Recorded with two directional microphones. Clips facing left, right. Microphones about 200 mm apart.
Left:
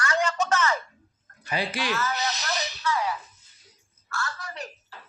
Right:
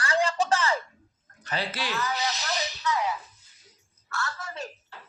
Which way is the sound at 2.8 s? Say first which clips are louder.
Left 1 dB; 20° right (ahead or behind).